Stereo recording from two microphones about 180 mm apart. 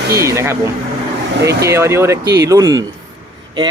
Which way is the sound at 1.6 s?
15° right (ahead or behind).